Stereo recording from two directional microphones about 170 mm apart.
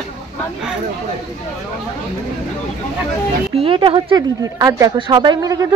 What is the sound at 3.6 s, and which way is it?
Speech, 30° right (ahead or behind).